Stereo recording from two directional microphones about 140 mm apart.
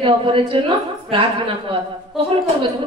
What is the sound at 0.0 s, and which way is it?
A woman's voice, 40° right (ahead or behind).